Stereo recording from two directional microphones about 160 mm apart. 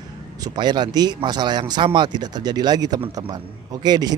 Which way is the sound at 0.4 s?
25° right (ahead or behind).